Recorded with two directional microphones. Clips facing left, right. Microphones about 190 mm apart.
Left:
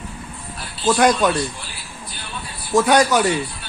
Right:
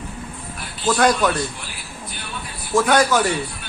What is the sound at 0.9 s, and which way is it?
Speech, 20° left (ahead or behind).